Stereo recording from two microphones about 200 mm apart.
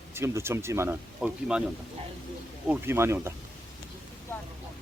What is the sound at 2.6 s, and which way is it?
Speech, 10° right (ahead or behind).